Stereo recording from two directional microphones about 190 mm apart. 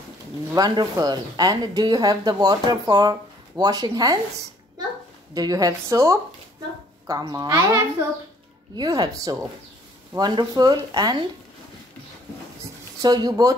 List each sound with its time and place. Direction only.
0.6 s a woman's voice: 20° right (ahead or behind)
5.3 s a woman's voice: 20° right (ahead or behind)
13.0 s a woman's voice: 20° right (ahead or behind)